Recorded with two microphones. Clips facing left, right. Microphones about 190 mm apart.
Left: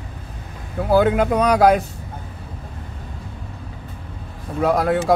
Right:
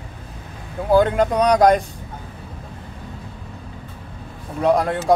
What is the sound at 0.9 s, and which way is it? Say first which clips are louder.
Speech: even; 5° left (ahead or behind).